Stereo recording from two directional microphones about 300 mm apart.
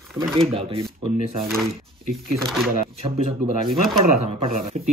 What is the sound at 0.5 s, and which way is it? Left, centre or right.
Speech, centre.